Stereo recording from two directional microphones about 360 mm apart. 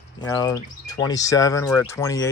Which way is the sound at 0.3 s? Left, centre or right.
Centre.